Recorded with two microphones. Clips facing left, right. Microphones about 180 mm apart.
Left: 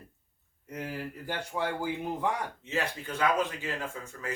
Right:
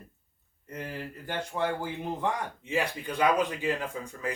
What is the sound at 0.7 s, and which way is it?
Speech, 10° left (ahead or behind).